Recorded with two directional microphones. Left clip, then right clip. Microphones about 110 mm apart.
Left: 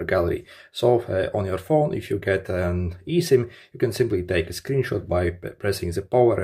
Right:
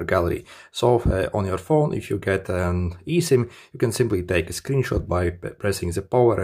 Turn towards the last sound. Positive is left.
turn(degrees=-30)  # may be behind; listen again after turning